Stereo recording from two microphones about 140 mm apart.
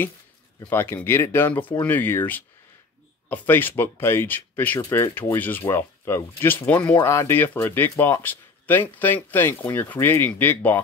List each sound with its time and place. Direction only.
0.7 s speech: 15° left (ahead or behind)